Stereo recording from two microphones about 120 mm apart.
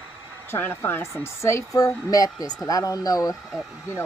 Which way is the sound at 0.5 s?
20° left (ahead or behind).